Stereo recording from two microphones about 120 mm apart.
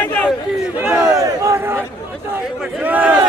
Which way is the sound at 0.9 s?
25° right (ahead or behind).